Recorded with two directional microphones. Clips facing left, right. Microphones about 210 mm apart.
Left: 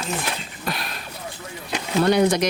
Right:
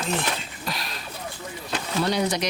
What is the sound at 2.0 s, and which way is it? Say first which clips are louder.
Speech: left 7 dB; 55° left (ahead or behind).